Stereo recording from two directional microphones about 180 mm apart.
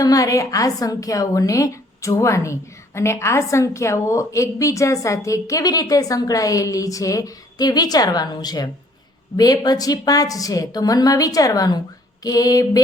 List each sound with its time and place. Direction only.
0.0 s a woman's voice: 20° left (ahead or behind)